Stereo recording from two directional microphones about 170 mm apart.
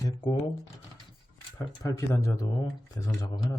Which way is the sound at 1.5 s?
20° left (ahead or behind).